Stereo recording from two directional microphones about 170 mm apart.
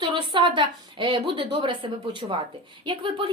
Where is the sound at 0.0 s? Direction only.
30° right (ahead or behind).